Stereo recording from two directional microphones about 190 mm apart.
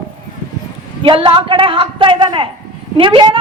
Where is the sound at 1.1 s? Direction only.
25° right (ahead or behind).